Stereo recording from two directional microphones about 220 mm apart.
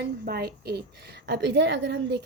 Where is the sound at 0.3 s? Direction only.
45° right (ahead or behind).